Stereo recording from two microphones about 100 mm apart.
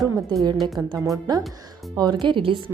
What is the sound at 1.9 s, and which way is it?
Speech, 45° right (ahead or behind).